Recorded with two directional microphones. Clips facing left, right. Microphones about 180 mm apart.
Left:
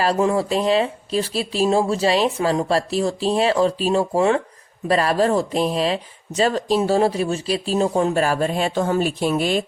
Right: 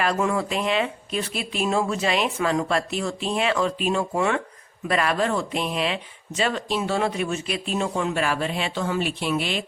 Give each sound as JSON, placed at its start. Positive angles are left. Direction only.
{"t": 0.0, "sound": "speech", "side_deg": 30}